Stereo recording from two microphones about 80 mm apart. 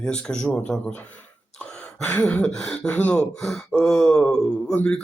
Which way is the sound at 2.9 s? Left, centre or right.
Centre.